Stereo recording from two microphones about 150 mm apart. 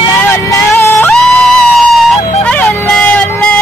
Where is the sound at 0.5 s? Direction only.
20° left (ahead or behind).